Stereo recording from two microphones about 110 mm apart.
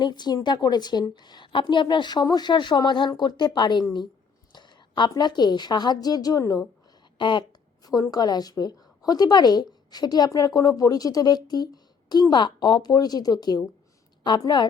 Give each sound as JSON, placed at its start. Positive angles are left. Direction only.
{"t": 0.0, "sound": "a woman's voice", "side_deg": 40}
{"t": 7.2, "sound": "speech", "side_deg": 45}
{"t": 7.9, "sound": "a woman's voice", "side_deg": 35}